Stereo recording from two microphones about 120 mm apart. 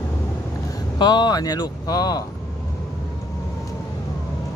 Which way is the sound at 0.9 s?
40° left (ahead or behind).